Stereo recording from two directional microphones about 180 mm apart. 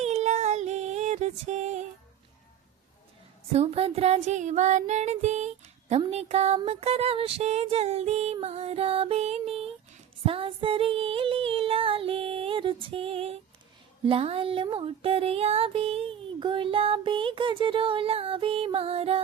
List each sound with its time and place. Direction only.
0.0 s music: 40° right (ahead or behind)
3.5 s music: 35° right (ahead or behind)